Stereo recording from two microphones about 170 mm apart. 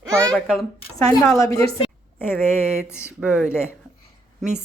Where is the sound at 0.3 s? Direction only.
Centre (ahead or behind).